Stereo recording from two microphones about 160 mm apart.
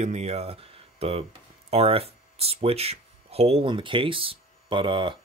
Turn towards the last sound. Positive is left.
turn(degrees=-30)  # may be behind; listen again after turning